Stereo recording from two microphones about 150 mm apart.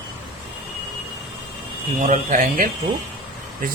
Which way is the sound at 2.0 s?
60° right (ahead or behind).